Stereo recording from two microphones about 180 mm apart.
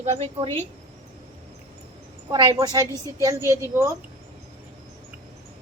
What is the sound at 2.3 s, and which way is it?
A woman's voice, 25° right (ahead or behind).